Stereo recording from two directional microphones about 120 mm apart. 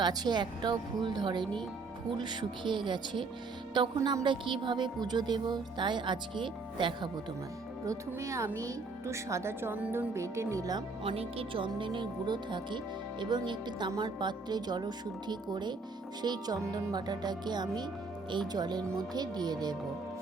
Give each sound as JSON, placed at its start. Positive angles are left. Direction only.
{"t": 0.0, "sound": "a woman's voice", "side_deg": -35}
{"t": 7.9, "sound": "speech", "side_deg": -25}
{"t": 10.2, "sound": "speech", "side_deg": -25}
{"t": 11.0, "sound": "a woman's voice", "side_deg": -50}